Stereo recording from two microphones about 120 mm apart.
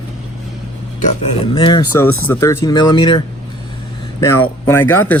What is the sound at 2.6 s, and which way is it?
Speech, 35° left (ahead or behind).